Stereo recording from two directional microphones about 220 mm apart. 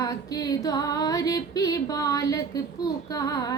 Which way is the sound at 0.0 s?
15° left (ahead or behind).